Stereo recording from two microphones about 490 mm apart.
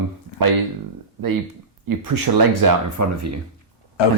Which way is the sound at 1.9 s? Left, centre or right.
Right.